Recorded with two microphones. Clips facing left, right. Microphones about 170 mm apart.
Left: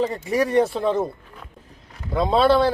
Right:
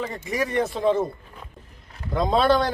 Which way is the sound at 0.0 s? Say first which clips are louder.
Left 6 dB; 35° left (ahead or behind).